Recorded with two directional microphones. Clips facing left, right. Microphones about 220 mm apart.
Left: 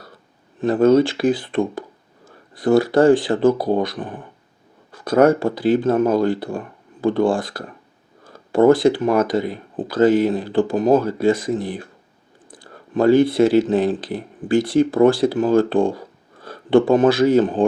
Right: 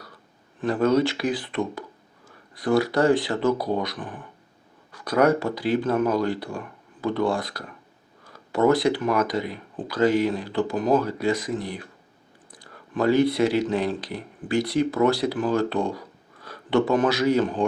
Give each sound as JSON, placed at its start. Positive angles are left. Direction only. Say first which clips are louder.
{"t": 0.6, "sound": "speech", "louder": "left 6 dB", "side_deg": 25}
{"t": 5.5, "sound": "speech", "louder": "left 7 dB", "side_deg": 50}
{"t": 5.7, "sound": "speech", "louder": "left 4 dB", "side_deg": 30}
{"t": 10.0, "sound": "speech", "louder": "left 6 dB", "side_deg": 50}
{"t": 10.2, "sound": "speech", "louder": "left 6 dB", "side_deg": 30}
{"t": 12.9, "sound": "speech", "louder": "left 6 dB", "side_deg": 30}